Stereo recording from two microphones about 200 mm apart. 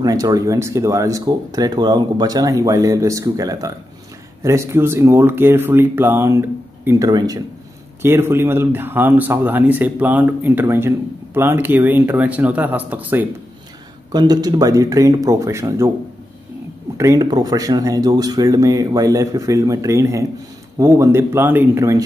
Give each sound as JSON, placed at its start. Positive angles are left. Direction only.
{"t": 0.0, "sound": "speech", "side_deg": -20}
{"t": 14.1, "sound": "speech", "side_deg": -20}
{"t": 16.9, "sound": "speech", "side_deg": -15}